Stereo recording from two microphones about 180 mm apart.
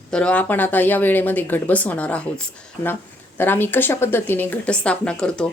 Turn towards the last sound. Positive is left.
turn(degrees=5)  # may be behind; listen again after turning